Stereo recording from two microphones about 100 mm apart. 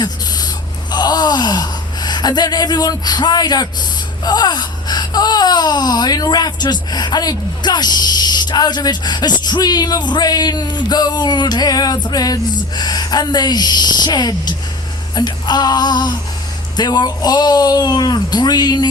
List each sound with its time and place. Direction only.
0.0 s gasp: 45° left (ahead or behind)
4.2 s wail: 45° left (ahead or behind)